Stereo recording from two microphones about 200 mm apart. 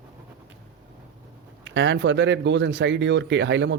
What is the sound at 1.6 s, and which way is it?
Speech, 65° right (ahead or behind).